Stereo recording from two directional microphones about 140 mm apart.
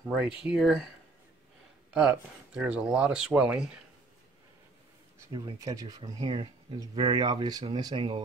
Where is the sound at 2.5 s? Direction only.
10° right (ahead or behind).